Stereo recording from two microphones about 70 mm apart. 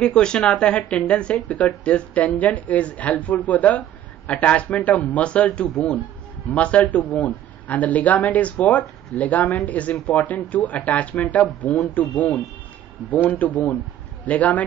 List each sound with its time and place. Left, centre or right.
0.0 s a man's voice: centre